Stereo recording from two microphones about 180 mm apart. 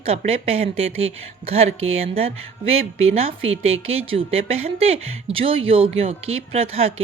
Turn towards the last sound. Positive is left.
turn(degrees=-35)  # may be behind; listen again after turning